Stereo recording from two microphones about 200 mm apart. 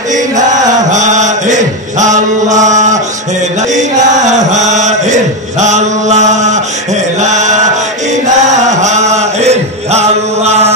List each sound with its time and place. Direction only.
0.1 s chant: 35° right (ahead or behind)